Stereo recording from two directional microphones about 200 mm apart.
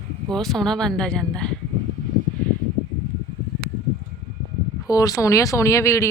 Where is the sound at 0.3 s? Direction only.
Centre (ahead or behind).